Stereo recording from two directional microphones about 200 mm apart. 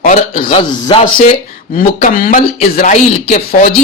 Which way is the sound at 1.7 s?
40° left (ahead or behind).